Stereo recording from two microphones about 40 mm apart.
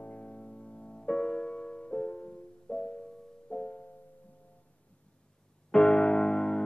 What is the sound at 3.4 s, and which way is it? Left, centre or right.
Music, left.